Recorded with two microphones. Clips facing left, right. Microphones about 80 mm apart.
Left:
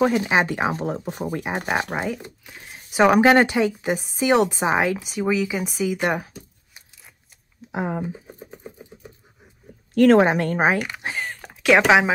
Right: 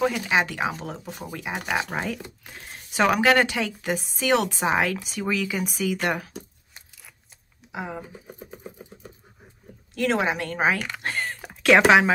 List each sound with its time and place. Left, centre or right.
0.0 s a woman's voice: left
1.9 s speech: centre
3.1 s a woman's voice: left
7.7 s speech: left
9.9 s speech: left
10.5 s speech: left; by 11.8 s centre